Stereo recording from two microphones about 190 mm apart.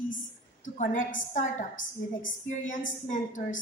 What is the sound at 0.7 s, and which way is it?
A woman's voice, 45° left (ahead or behind).